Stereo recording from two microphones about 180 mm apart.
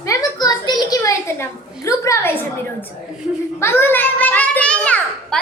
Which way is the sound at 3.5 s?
15° left (ahead or behind).